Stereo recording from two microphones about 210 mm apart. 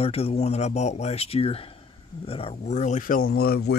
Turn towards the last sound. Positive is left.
turn(degrees=45)  # may be behind; listen again after turning